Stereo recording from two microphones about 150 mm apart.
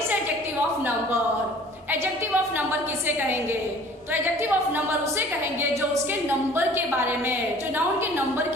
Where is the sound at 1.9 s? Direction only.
15° right (ahead or behind).